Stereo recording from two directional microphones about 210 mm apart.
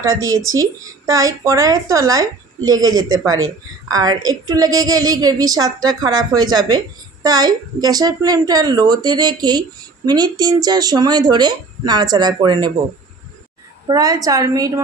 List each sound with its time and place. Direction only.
0.6 s a woman's voice: 15° right (ahead or behind)
2.8 s speech: 70° right (ahead or behind)
3.9 s a woman's voice: 20° right (ahead or behind)
13.8 s a woman's voice: 15° right (ahead or behind)